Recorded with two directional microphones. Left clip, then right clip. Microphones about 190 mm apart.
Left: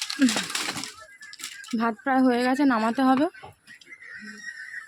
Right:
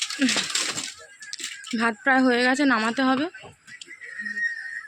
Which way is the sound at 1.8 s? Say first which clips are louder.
Right 3 dB; 10° left (ahead or behind).